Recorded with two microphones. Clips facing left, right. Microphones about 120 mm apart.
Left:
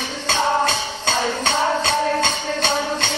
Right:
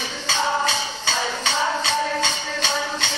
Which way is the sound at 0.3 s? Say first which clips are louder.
Left 3 dB; 55° left (ahead or behind).